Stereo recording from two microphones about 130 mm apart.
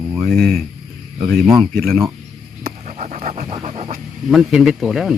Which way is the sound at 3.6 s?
55° right (ahead or behind).